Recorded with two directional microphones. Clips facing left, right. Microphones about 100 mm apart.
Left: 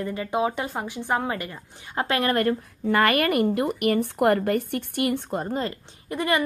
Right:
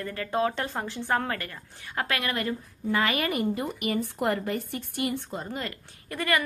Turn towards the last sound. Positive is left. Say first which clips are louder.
# left 3 dB
turn(degrees=20)  # may be behind; listen again after turning